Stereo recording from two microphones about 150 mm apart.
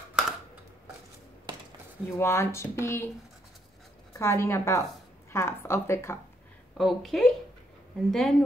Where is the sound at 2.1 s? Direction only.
15° left (ahead or behind).